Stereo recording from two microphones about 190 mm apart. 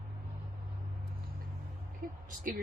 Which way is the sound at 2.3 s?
45° right (ahead or behind).